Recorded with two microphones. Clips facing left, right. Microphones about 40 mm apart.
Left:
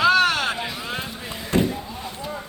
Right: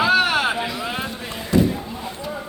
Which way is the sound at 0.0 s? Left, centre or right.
Centre.